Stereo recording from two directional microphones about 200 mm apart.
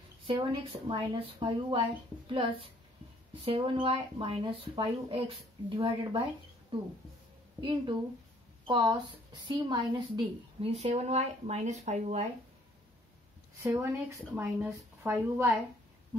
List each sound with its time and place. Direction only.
0.2 s speech: 25° right (ahead or behind)
8.6 s a woman's voice: 20° right (ahead or behind)
13.6 s speech: 15° right (ahead or behind)